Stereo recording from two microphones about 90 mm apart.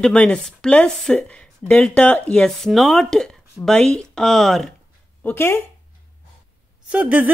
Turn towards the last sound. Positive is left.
turn(degrees=-15)  # may be behind; listen again after turning